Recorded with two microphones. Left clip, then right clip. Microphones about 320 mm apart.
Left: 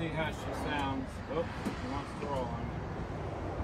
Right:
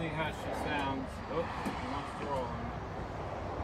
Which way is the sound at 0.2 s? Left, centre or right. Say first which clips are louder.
Even; centre.